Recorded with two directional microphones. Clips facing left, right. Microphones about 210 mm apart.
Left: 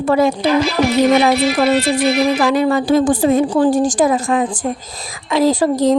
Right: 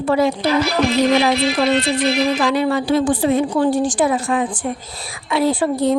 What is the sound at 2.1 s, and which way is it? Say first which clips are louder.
A woman's voice: left 3 dB; 45° left (ahead or behind).